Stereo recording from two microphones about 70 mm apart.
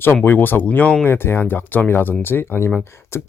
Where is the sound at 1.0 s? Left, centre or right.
Left.